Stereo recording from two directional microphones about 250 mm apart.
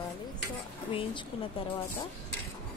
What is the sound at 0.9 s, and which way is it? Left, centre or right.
Speech, left.